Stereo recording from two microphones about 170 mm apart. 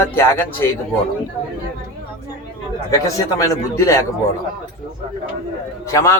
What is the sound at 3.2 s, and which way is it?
Speech, 20° left (ahead or behind).